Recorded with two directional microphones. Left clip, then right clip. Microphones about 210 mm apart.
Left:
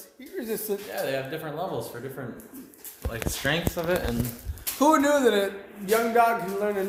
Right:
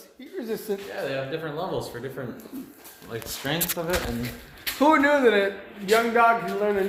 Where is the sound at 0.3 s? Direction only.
Centre (ahead or behind).